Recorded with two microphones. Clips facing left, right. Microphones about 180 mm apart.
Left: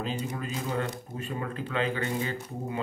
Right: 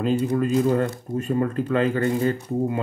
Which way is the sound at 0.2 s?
50° right (ahead or behind).